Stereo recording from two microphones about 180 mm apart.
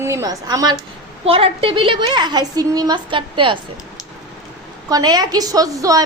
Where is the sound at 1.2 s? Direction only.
30° right (ahead or behind).